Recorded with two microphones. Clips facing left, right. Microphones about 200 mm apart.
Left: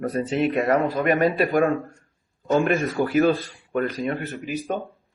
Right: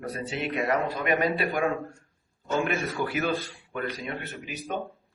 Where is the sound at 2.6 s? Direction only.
35° left (ahead or behind).